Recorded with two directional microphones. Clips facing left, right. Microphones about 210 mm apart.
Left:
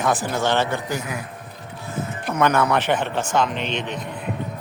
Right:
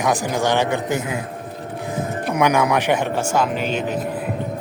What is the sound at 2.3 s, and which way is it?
A man's voice, 10° right (ahead or behind).